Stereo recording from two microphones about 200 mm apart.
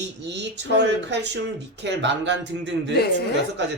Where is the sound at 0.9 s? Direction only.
60° right (ahead or behind).